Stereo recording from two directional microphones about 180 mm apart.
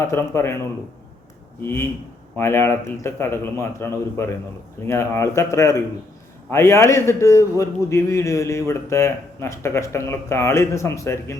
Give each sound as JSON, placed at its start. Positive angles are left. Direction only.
{"t": 0.0, "sound": "a man's voice", "side_deg": 15}
{"t": 1.6, "sound": "a man's voice", "side_deg": 15}